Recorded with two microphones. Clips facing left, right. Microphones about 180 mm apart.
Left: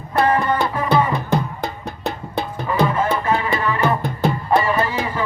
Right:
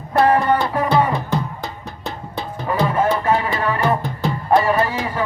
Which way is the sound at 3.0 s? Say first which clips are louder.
Right 2 dB; 50° right (ahead or behind).